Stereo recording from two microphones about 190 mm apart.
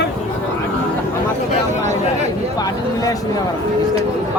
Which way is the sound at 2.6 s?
20° left (ahead or behind).